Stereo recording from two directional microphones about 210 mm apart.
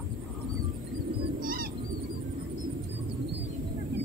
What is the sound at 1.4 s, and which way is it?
Bird, 45° right (ahead or behind).